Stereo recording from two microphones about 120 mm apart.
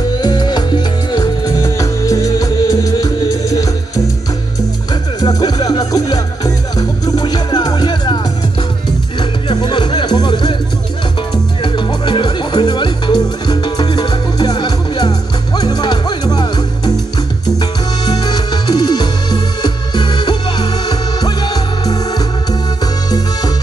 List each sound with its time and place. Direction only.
0.2 s music: 35° left (ahead or behind)
5.2 s music: 35° left (ahead or behind)
9.5 s music: 40° left (ahead or behind)
11.6 s music: 40° left (ahead or behind)